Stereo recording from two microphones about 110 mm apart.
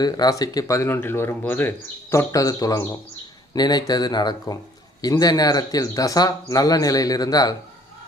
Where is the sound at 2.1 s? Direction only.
30° left (ahead or behind).